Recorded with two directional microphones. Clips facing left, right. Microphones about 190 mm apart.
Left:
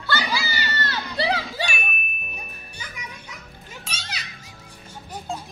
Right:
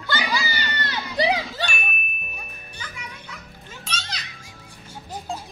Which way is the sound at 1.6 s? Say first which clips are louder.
Even; centre (ahead or behind).